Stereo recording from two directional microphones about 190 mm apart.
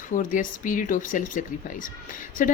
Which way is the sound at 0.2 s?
45° left (ahead or behind).